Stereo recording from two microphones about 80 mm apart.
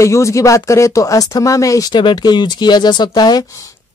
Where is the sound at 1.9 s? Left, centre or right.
Left.